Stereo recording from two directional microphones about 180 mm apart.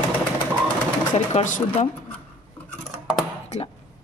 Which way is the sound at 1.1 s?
40° left (ahead or behind).